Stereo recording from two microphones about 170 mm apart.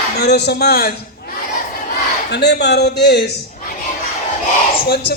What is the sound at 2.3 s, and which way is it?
Speech, 80° left.